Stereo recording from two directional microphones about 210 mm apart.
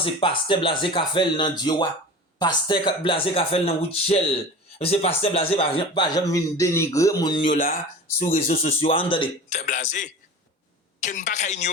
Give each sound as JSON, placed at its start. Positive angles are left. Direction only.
{"t": 0.0, "sound": "speech", "side_deg": 25}
{"t": 7.5, "sound": "speech", "side_deg": 45}
{"t": 8.2, "sound": "speech", "side_deg": 30}